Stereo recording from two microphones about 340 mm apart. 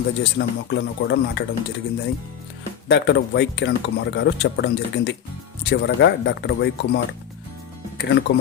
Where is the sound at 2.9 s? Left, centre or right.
Left.